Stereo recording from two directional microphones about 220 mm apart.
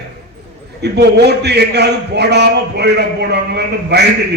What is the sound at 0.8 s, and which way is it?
A man's voice, 50° right (ahead or behind).